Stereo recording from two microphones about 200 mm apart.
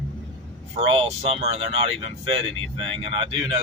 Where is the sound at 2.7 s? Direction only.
25° right (ahead or behind).